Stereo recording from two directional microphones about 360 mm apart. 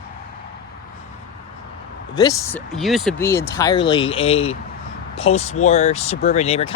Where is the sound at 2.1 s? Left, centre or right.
Centre.